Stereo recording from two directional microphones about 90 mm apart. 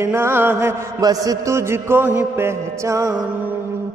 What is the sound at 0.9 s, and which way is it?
Mantra, 40° right (ahead or behind).